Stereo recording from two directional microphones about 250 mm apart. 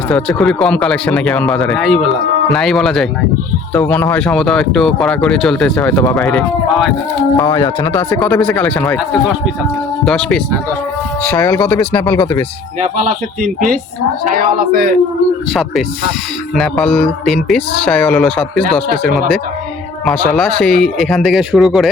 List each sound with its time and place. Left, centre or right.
0.1 s speech: centre
7.3 s speech: centre
14.3 s speech: right
16.6 s speech: centre